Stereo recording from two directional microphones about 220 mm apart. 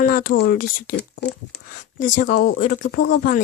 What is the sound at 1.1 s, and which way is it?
Speech, 50° left (ahead or behind).